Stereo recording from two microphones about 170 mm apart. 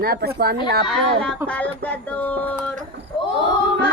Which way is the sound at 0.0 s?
65° right (ahead or behind).